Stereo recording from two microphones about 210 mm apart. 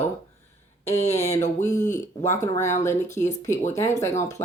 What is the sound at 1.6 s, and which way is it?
A woman's voice, 15° left (ahead or behind).